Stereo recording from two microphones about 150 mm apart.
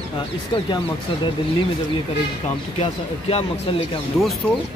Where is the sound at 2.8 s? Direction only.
45° left (ahead or behind).